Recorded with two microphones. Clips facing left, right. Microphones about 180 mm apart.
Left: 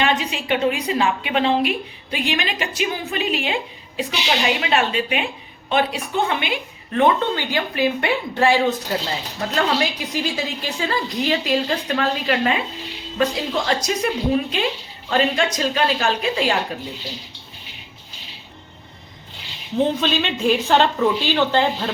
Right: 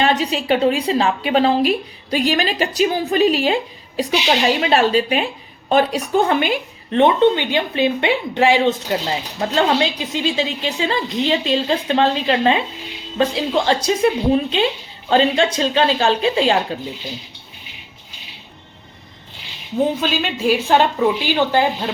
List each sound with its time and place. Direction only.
0.0 s a woman's voice: 35° right (ahead or behind)
6.9 s a woman's voice: 20° right (ahead or behind)
19.8 s a woman's voice: 5° right (ahead or behind)